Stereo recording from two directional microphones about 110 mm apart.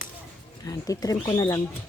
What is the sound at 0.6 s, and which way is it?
Speech, 35° left (ahead or behind).